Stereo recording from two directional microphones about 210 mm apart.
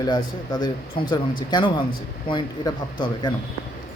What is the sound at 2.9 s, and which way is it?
Speech, 20° left (ahead or behind).